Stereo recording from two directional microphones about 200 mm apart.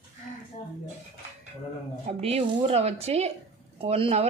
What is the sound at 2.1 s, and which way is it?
Speech, 30° right (ahead or behind).